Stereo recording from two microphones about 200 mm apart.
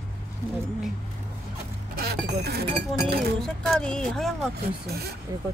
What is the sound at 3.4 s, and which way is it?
Speech, centre (ahead or behind).